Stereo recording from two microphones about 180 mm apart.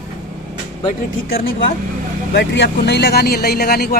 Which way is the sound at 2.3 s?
65° left (ahead or behind).